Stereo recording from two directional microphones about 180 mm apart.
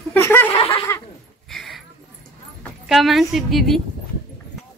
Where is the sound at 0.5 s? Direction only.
30° left (ahead or behind).